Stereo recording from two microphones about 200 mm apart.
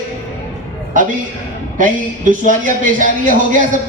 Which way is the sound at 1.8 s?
40° right (ahead or behind).